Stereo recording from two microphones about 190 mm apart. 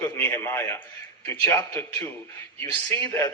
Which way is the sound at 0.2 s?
15° left (ahead or behind).